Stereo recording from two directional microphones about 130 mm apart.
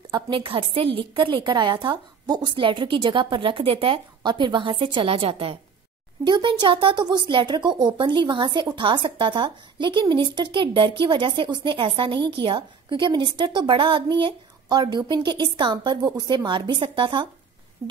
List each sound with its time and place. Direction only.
0.1 s a woman's voice: 40° right (ahead or behind)
6.2 s a woman's voice: 35° right (ahead or behind)